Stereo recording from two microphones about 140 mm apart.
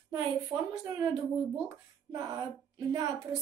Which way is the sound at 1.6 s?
25° right (ahead or behind).